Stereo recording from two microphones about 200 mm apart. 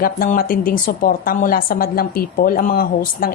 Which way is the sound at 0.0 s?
45° left (ahead or behind).